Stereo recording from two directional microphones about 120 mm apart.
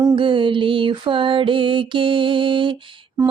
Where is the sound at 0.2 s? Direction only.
45° right (ahead or behind).